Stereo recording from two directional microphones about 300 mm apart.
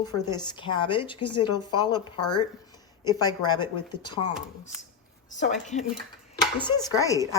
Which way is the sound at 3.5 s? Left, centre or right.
Centre.